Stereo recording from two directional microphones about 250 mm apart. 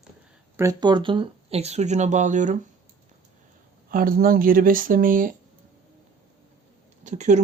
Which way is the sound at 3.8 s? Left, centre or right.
Right.